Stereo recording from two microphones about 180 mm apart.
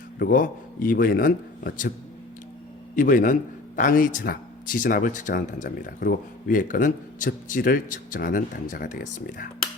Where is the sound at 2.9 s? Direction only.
45° left (ahead or behind).